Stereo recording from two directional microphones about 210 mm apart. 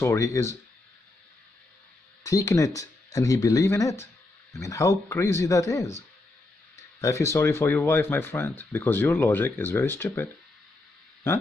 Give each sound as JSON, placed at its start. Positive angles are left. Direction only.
{"t": 0.0, "sound": "speech", "side_deg": 15}
{"t": 2.2, "sound": "speech", "side_deg": 15}
{"t": 7.0, "sound": "speech", "side_deg": 15}